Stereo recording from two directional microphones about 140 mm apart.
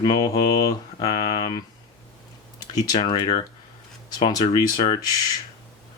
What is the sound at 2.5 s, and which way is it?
Speech, 25° left (ahead or behind).